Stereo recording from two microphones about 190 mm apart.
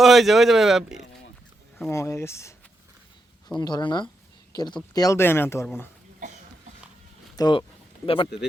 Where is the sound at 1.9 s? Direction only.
15° left (ahead or behind).